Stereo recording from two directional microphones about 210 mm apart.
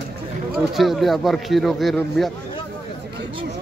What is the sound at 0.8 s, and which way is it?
Speech, centre (ahead or behind).